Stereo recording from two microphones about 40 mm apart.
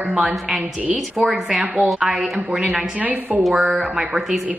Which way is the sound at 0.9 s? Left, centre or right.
Centre.